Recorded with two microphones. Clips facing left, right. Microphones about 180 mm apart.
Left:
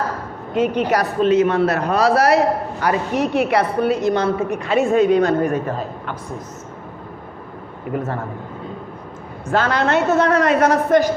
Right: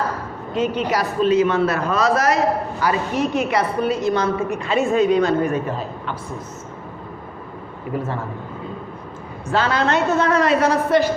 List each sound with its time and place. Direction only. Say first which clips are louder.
0.5 s a woman's voice: left 3 dB; 55° left (ahead or behind)
7.9 s a woman's voice: left 1 dB; 50° left (ahead or behind)
9.5 s a woman's voice: left 1 dB; 50° left (ahead or behind)